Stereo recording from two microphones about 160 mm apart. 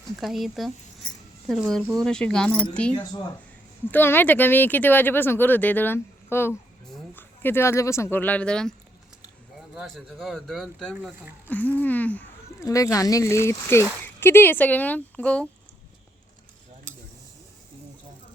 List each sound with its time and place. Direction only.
0.2 s speech: centre (ahead or behind)
11.4 s speech: 10° left (ahead or behind)
12.6 s speech: 20° left (ahead or behind)